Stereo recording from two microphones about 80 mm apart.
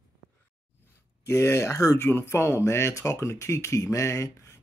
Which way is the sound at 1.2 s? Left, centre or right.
Left.